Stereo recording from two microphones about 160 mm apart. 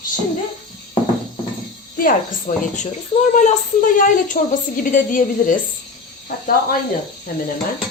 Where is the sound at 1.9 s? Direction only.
60° left (ahead or behind).